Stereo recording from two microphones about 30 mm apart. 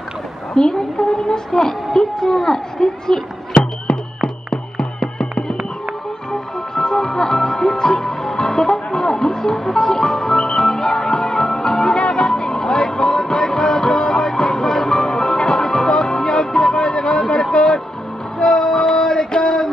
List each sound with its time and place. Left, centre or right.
0.6 s a woman's voice: left
3.9 s music: left
6.7 s music: left
17.3 s a sound: left
18.4 s music: left